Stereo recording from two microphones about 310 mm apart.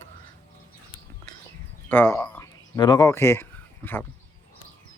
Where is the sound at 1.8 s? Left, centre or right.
Centre.